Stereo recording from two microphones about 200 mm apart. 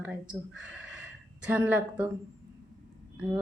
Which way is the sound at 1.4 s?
10° right (ahead or behind).